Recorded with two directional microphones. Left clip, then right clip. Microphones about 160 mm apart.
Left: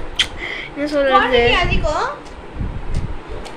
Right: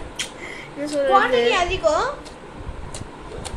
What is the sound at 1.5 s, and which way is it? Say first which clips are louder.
Speech: left 1 dB; 90° right.